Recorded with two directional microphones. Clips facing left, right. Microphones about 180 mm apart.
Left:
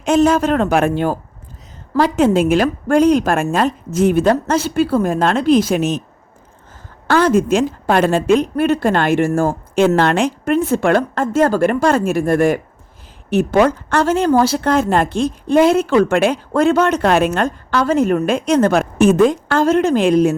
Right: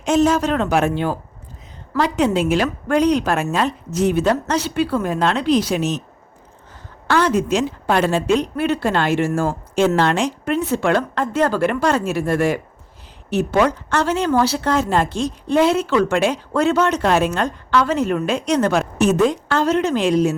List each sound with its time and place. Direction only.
0.0 s a woman's voice: 55° left (ahead or behind)
7.1 s a woman's voice: 50° left (ahead or behind)